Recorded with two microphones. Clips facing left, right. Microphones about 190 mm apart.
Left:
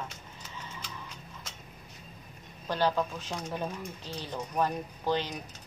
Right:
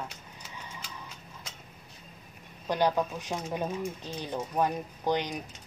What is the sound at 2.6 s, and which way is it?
Speech, 15° right (ahead or behind).